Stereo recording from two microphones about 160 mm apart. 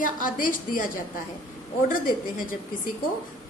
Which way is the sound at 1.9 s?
60° left (ahead or behind).